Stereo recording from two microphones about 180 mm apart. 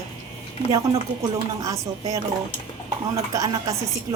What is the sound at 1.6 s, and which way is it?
Speech, 20° right (ahead or behind).